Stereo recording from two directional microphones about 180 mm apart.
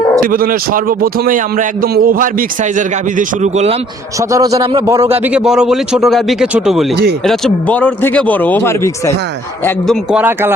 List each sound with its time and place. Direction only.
0.2 s a man's voice: 50° right (ahead or behind)
4.2 s a man's voice: 20° right (ahead or behind)
5.2 s speech: 5° right (ahead or behind); by 9.1 s 15° left (ahead or behind)
9.8 s speech: centre (ahead or behind)